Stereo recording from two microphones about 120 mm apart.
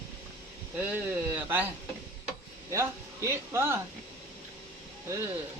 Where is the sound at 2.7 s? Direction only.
25° right (ahead or behind).